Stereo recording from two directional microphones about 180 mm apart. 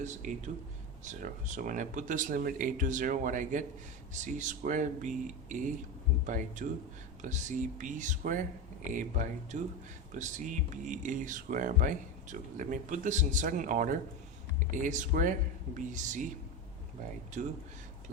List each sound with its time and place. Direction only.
0.0 s speech: 45° right (ahead or behind)
17.4 s speech: 45° right (ahead or behind)